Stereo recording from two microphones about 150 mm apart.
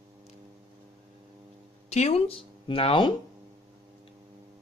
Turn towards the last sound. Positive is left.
turn(degrees=35)  # may be behind; listen again after turning